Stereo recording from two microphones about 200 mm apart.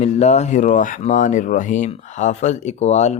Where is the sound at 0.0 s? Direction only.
35° left (ahead or behind).